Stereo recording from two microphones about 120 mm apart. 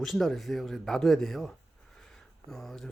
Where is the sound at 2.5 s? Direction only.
5° left (ahead or behind).